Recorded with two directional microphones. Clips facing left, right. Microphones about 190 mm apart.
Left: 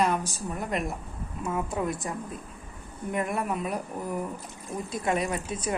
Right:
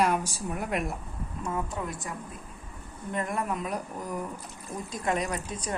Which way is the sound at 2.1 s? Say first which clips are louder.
Left 4 dB; 25° left (ahead or behind).